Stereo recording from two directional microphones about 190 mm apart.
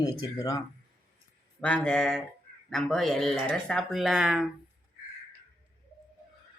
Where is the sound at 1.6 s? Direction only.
5° left (ahead or behind).